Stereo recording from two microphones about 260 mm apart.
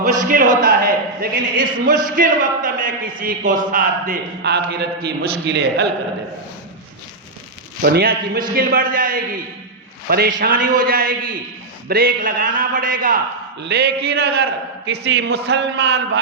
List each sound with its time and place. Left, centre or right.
0.2 s speech: right
7.8 s speech: right